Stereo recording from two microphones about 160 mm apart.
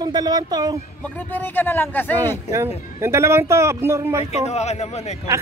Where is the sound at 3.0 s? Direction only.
15° right (ahead or behind).